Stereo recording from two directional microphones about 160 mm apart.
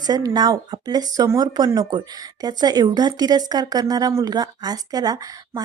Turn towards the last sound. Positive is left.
turn(degrees=-20)  # may be behind; listen again after turning